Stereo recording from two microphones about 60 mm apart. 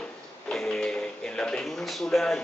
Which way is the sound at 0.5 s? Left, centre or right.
Centre.